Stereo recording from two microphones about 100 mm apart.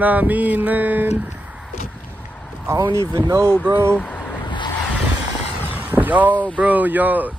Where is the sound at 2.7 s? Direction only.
30° right (ahead or behind).